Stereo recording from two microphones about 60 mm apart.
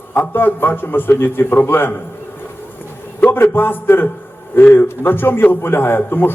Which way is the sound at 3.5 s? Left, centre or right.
Left.